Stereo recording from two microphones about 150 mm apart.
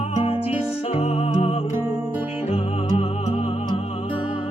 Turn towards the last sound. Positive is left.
turn(degrees=45)  # may be behind; listen again after turning